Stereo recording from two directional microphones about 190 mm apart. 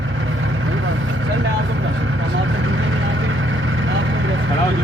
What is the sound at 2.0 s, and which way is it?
Vehicle, 80° right.